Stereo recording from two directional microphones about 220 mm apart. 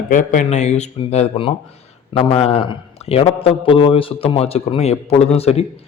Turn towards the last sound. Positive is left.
turn(degrees=30)  # may be behind; listen again after turning